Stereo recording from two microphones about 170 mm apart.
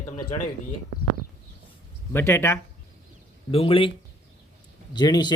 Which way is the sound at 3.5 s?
30° left (ahead or behind).